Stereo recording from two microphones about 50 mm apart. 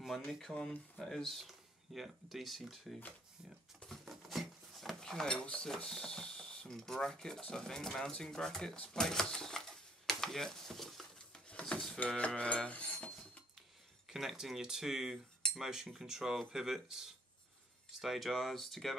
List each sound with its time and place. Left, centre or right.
0.0 s speech: centre
4.0 s speech: centre
8.7 s speech: centre
9.0 s a sound: centre
12.4 s cutlery: left
14.0 s speech: centre
18.3 s speech: centre